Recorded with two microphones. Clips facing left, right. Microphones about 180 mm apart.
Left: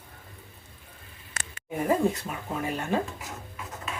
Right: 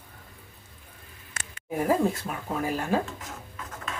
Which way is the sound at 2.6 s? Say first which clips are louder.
Right 2 dB; 5° right (ahead or behind).